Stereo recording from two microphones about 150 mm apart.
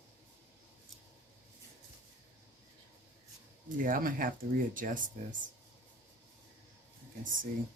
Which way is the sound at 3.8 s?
65° right (ahead or behind).